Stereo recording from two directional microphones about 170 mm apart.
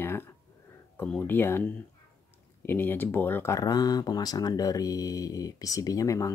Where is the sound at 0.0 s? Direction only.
15° left (ahead or behind).